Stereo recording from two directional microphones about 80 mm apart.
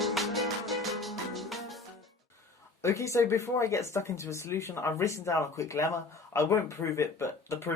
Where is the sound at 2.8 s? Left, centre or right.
Left.